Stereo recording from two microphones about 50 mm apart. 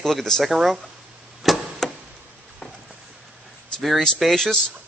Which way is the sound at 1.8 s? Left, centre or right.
Centre.